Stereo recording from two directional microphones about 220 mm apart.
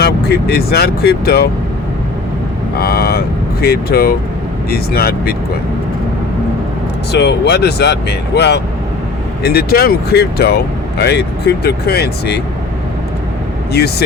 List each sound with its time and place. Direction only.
0.0 s speech: 45° left (ahead or behind)
2.7 s speech: 45° left (ahead or behind)
7.1 s speech: 50° left (ahead or behind)